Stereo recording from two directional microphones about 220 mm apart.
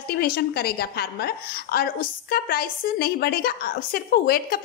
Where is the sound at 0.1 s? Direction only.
45° left (ahead or behind).